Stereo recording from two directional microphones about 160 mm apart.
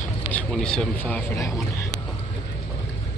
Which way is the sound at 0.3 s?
5° left (ahead or behind).